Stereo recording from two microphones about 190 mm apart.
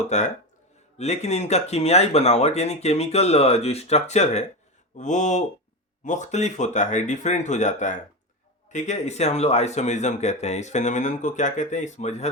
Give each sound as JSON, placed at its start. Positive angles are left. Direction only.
{"t": 0.0, "sound": "speech", "side_deg": 35}